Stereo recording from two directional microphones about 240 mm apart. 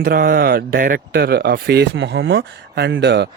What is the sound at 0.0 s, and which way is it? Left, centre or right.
Speech, right.